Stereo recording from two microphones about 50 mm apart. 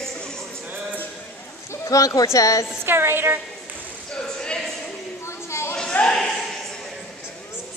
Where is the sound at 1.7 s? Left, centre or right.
Left.